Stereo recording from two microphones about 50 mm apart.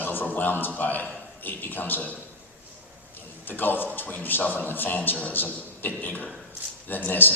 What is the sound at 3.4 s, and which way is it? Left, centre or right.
A man's voice, left.